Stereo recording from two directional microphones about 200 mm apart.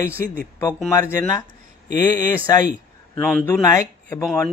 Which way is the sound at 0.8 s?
15° left (ahead or behind).